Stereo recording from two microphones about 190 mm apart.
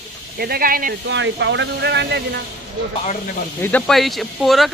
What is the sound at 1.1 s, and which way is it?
Speech, 70° right (ahead or behind).